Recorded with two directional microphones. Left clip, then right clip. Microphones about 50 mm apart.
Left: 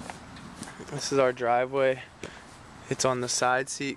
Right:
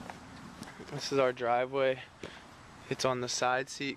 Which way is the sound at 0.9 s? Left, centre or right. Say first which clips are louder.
Left 5 dB; left.